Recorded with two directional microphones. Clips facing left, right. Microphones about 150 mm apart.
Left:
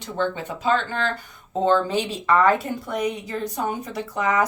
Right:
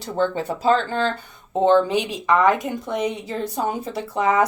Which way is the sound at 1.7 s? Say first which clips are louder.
Right 3 dB; 15° right (ahead or behind).